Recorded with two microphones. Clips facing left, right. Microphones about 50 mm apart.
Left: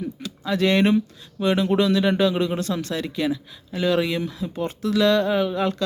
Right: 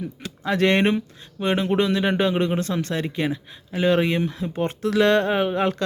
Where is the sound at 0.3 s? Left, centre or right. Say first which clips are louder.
Right 1 dB; right.